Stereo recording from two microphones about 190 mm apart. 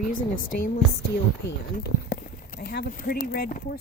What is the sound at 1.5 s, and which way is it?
Speech, 65° left (ahead or behind).